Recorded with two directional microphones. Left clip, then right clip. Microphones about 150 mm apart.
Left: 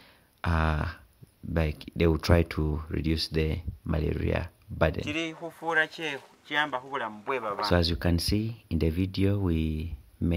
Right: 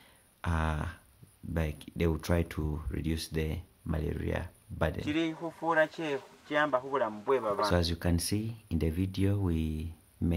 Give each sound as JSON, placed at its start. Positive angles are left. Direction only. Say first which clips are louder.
{"t": 0.4, "sound": "a sound", "louder": "left 5 dB", "side_deg": 35}
{"t": 1.5, "sound": "speech", "louder": "left 6 dB", "side_deg": 35}
{"t": 5.0, "sound": "speech", "louder": "even", "side_deg": 20}